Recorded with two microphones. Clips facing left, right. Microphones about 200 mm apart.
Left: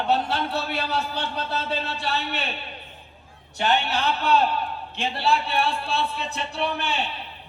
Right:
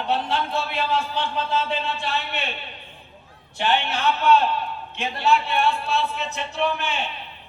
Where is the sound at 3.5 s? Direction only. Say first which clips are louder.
Even; 40° left (ahead or behind).